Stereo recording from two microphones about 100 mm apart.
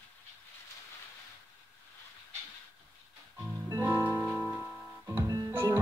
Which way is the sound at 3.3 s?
15° right (ahead or behind).